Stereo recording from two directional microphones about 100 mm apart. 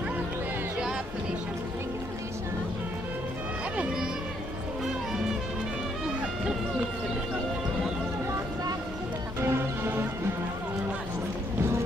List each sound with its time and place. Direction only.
3.7 s music: 5° right (ahead or behind)
9.4 s music: 20° right (ahead or behind)